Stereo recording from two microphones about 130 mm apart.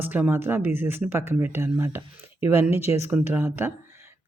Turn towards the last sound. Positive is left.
turn(degrees=-15)  # may be behind; listen again after turning